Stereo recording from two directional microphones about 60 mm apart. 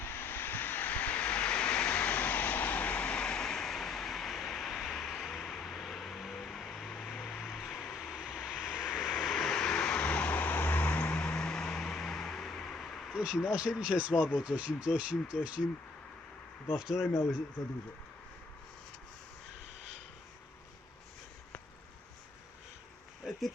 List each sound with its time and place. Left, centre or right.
0.0 s vehicle: left; by 9.1 s centre
9.2 s vehicle: centre
13.1 s speech: centre
15.6 s speech: centre
16.7 s speech: centre